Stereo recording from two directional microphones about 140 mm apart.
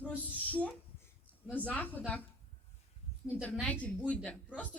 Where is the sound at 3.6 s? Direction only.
10° left (ahead or behind).